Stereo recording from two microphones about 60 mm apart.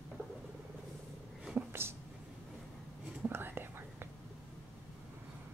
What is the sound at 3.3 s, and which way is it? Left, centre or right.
Whispering, right.